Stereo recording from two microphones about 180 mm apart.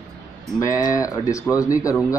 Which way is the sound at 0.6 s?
20° left (ahead or behind).